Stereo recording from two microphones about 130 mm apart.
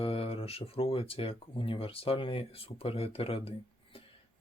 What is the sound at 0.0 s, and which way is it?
Speech, 45° left (ahead or behind).